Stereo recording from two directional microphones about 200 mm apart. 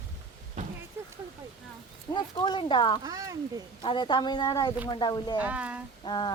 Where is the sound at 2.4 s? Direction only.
25° left (ahead or behind).